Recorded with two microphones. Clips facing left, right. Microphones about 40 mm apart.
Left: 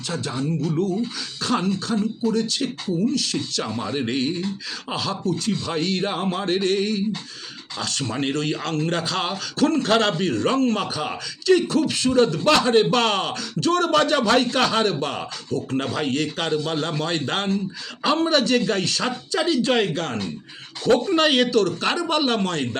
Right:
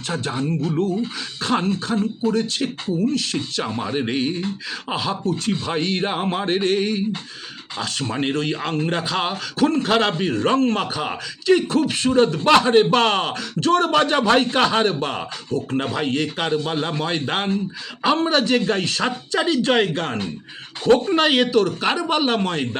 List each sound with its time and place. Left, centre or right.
0.1 s a man's voice: right
5.2 s a man's voice: right
21.2 s speech: centre